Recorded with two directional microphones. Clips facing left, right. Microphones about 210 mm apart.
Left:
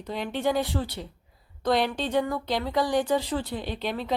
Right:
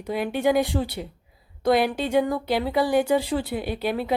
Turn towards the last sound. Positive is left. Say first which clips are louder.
# right 4 dB
turn(degrees=-10)  # may be behind; listen again after turning